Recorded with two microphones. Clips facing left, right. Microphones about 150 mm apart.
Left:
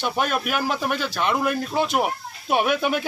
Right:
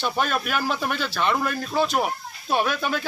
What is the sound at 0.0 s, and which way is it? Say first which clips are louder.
Speech: left 1 dB; 10° left (ahead or behind).